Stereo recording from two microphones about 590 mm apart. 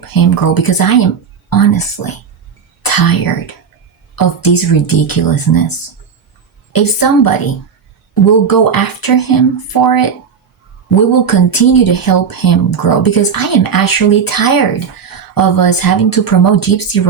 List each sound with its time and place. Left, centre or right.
0.1 s speech: left
6.7 s speech: left
8.4 s speech: left
11.3 s speech: left